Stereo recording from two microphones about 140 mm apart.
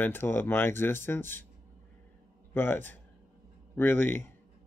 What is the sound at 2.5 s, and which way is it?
Speech, 15° left (ahead or behind).